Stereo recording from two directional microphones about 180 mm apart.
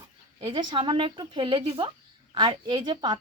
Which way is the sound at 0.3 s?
25° right (ahead or behind).